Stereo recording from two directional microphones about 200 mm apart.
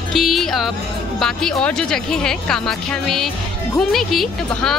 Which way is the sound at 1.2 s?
5° left (ahead or behind).